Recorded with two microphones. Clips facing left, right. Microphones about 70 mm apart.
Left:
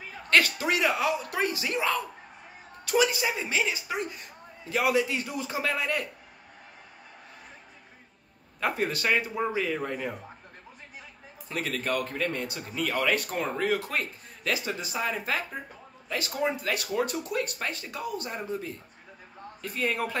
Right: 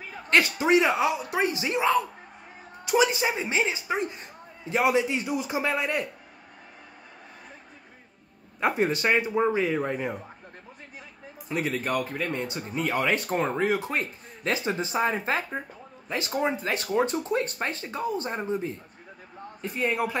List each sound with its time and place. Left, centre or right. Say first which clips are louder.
0.3 s speech: right 3 dB; right
8.5 s speech: right 4 dB; right
11.4 s a man's voice: right 3 dB; centre